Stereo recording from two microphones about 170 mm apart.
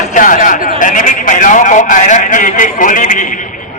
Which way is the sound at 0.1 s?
50° left (ahead or behind).